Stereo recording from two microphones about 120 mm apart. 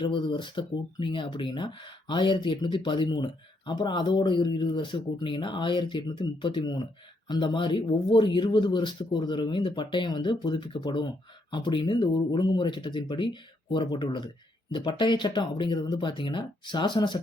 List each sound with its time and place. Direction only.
0.0 s speech: 40° left (ahead or behind)